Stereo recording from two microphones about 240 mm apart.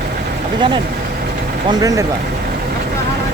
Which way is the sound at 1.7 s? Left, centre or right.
Centre.